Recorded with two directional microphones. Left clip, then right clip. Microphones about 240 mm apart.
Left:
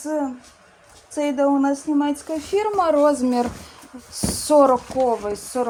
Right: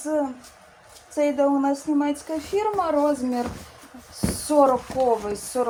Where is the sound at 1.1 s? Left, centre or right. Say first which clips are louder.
Left 1 dB; left.